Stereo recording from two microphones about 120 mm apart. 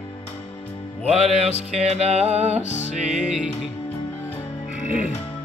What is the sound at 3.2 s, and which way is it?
Music, 5° right (ahead or behind).